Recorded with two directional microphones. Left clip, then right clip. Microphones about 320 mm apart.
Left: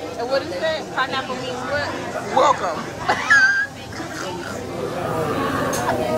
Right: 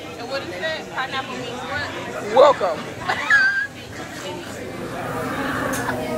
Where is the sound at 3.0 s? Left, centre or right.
Left.